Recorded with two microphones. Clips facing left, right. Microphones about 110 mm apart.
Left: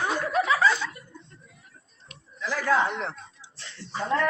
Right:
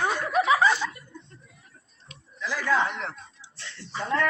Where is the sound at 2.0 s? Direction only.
45° left (ahead or behind).